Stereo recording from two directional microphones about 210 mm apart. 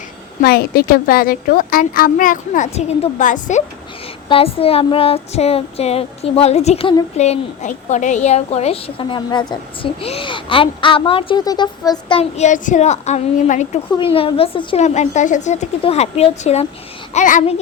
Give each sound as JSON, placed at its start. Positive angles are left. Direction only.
{"t": 0.4, "sound": "a woman's voice", "side_deg": 45}
{"t": 4.3, "sound": "a woman's voice", "side_deg": 25}